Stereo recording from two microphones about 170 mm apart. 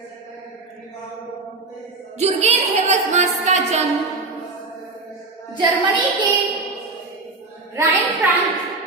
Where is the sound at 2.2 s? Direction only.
40° right (ahead or behind).